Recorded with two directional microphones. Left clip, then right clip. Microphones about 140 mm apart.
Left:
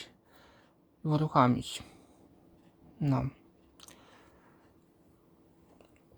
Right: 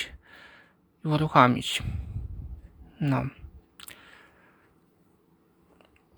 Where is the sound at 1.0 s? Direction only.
10° right (ahead or behind).